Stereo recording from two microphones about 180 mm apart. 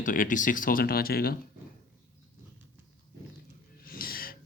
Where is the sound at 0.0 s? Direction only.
45° left (ahead or behind).